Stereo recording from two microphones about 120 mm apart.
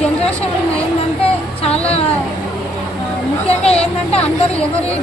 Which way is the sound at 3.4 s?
60° left (ahead or behind).